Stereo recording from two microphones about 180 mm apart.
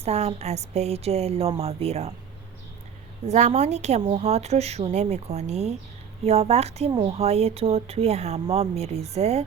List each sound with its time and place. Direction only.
0.0 s speech: 35° right (ahead or behind)
3.2 s speech: 40° right (ahead or behind)
6.9 s speech: 25° right (ahead or behind)
7.2 s speech: 35° right (ahead or behind)